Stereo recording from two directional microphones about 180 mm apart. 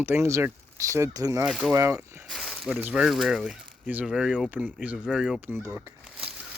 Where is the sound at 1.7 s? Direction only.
15° right (ahead or behind).